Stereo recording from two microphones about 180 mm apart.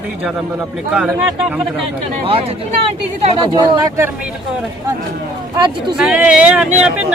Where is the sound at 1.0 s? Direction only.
10° right (ahead or behind).